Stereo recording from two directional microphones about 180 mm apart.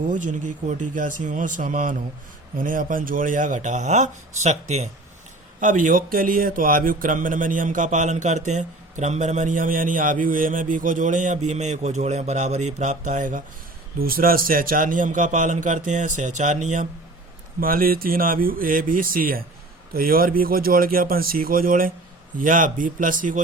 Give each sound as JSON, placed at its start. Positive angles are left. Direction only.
{"t": 0.1, "sound": "speech", "side_deg": -45}
{"t": 17.6, "sound": "speech", "side_deg": -55}